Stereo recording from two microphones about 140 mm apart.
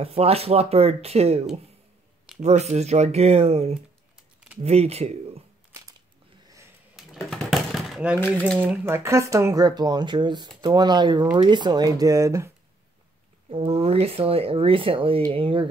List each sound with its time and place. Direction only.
0.0 s speech: 45° right (ahead or behind)
7.2 s a sound: centre (ahead or behind)
8.5 s speech: 15° right (ahead or behind)
13.5 s speech: 45° right (ahead or behind)